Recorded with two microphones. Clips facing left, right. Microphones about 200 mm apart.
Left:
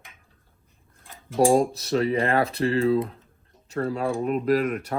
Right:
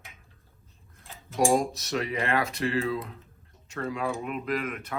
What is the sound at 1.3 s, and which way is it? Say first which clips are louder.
Speech: left 5 dB; 30° left (ahead or behind).